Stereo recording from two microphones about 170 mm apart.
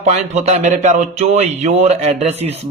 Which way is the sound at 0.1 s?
40° right (ahead or behind).